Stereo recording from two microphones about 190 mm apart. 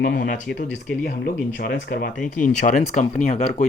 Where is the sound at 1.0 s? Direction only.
55° left (ahead or behind); by 3.6 s 35° left (ahead or behind).